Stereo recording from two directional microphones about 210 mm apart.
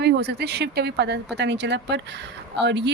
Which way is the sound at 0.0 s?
50° right (ahead or behind).